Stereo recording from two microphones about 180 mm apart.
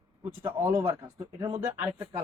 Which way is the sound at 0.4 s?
10° right (ahead or behind).